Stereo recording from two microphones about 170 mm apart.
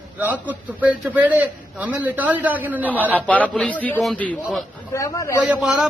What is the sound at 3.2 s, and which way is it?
A man's voice, 10° left (ahead or behind).